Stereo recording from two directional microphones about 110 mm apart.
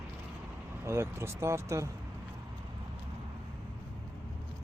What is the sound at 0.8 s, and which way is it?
Speech, 25° right (ahead or behind).